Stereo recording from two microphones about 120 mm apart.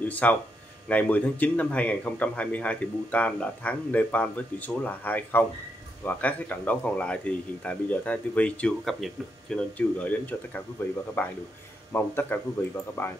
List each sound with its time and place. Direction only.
0.1 s speech: 15° left (ahead or behind)